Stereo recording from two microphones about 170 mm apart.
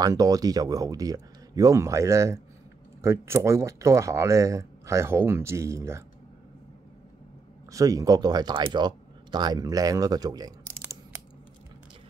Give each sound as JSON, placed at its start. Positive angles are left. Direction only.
{"t": 0.0, "sound": "speech", "side_deg": -20}
{"t": 7.7, "sound": "speech", "side_deg": -20}